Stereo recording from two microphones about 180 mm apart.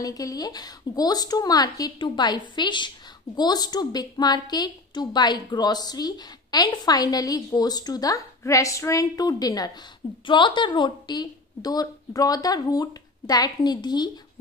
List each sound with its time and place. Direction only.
0.0 s a woman's voice: 20° left (ahead or behind)